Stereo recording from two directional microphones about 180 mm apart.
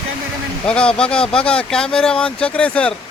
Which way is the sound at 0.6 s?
5° left (ahead or behind).